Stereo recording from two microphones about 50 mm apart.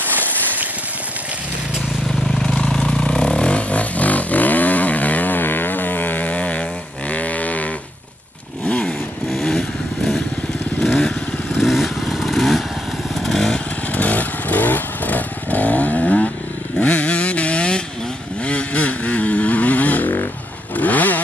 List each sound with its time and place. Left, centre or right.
2.4 s vehicle: centre
7.1 s a sound: left
8.6 s motorcycle: left
11.1 s motorcycle: centre
13.9 s motorcycle: left
16.0 s chainsaw: left
16.8 s vehicle: left
20.7 s motorcycle: left